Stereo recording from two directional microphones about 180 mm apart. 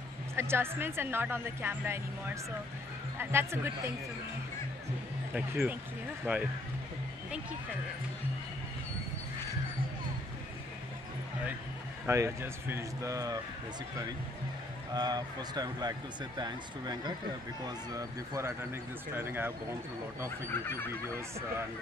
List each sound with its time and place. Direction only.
0.4 s a woman's voice: 15° right (ahead or behind)
5.3 s a woman's voice: 10° right (ahead or behind)
12.1 s a woman's voice: 15° right (ahead or behind)
15.0 s a woman's voice: 20° right (ahead or behind)